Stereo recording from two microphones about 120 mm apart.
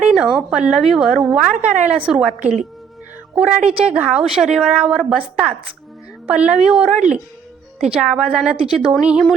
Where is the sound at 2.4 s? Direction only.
80° right.